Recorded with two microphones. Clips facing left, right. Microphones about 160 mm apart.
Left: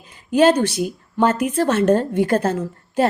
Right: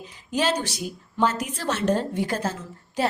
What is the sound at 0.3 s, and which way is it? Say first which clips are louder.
A woman's voice: left 10 dB; 55° left (ahead or behind).